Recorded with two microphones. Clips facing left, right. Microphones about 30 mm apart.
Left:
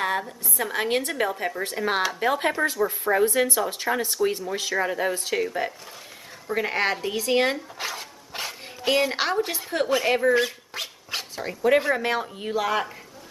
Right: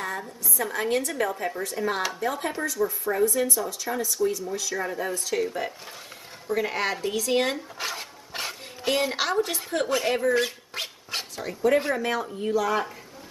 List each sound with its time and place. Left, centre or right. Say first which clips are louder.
0.6 s a woman's voice: left 1 dB; left
5.3 s a woman's voice: left 1 dB; centre
7.5 s dog: even; centre
8.8 s a woman's voice: left 3 dB; centre
9.1 s a woman's voice: left 1 dB; left
10.4 s speech: left 1 dB; centre
11.4 s a woman's voice: left 2 dB; left